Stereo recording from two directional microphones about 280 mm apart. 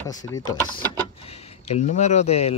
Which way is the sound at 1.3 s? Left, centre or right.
Left.